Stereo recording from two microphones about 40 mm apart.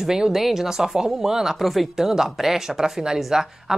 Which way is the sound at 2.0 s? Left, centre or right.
Centre.